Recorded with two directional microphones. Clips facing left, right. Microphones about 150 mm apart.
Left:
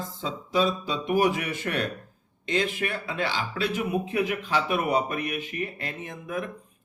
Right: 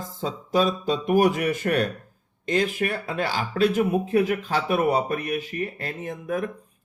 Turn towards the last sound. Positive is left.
turn(degrees=-40)  # may be behind; listen again after turning